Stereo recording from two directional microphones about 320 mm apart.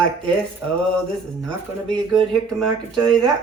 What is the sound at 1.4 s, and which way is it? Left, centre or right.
Speech, centre.